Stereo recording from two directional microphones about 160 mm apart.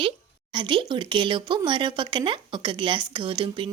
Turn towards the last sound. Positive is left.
turn(degrees=-30)  # may be behind; listen again after turning